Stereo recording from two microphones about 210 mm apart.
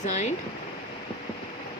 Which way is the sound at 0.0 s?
35° left (ahead or behind).